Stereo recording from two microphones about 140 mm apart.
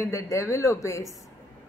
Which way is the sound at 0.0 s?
20° left (ahead or behind).